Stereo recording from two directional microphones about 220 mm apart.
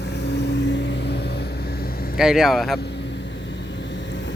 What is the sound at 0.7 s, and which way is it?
Vehicle, 50° left (ahead or behind).